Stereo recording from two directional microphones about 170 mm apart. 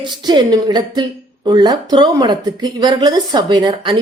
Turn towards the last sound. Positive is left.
turn(degrees=-25)  # may be behind; listen again after turning